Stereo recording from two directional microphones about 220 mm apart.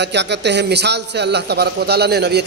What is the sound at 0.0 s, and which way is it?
A man's voice, 50° right (ahead or behind).